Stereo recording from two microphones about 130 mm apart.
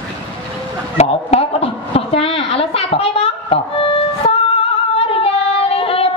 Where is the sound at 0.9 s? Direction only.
55° left (ahead or behind).